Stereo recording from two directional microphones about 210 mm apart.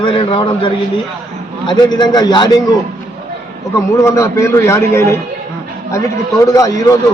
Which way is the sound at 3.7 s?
15° left (ahead or behind).